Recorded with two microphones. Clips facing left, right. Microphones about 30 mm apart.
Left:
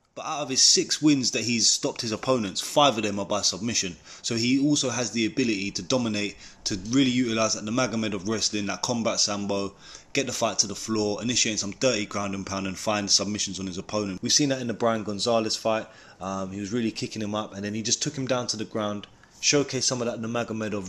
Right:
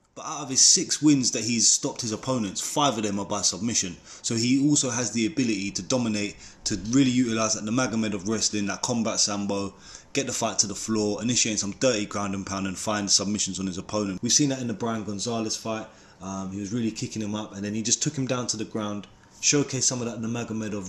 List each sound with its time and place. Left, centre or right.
0.2 s speech: left
1.9 s speech: left
15.0 s speech: left